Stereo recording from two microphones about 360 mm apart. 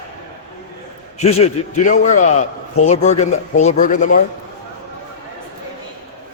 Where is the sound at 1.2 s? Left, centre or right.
Centre.